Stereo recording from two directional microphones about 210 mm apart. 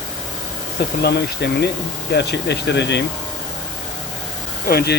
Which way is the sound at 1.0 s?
50° left (ahead or behind).